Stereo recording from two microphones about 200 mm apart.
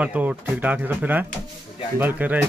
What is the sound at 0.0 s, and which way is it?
Speech, 5° right (ahead or behind).